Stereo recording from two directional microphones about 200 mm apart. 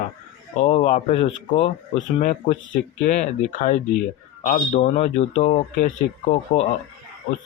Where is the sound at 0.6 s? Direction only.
30° left (ahead or behind).